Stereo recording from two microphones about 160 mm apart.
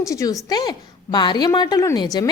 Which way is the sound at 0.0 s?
20° left (ahead or behind).